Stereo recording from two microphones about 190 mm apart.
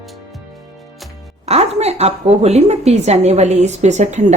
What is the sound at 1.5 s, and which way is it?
A woman's voice, 35° right (ahead or behind).